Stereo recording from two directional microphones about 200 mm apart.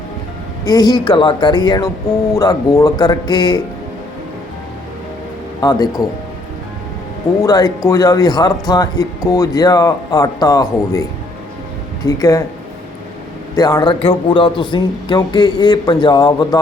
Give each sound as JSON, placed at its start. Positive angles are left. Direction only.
{"t": 0.6, "sound": "speech", "side_deg": 20}
{"t": 5.5, "sound": "speech", "side_deg": 20}
{"t": 7.4, "sound": "speech", "side_deg": 20}
{"t": 12.0, "sound": "speech", "side_deg": 15}
{"t": 13.6, "sound": "speech", "side_deg": 20}